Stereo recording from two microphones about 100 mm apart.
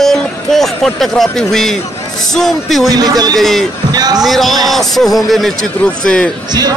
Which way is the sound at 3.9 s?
40° right (ahead or behind).